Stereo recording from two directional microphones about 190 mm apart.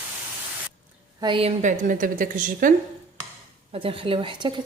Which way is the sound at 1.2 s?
25° right (ahead or behind).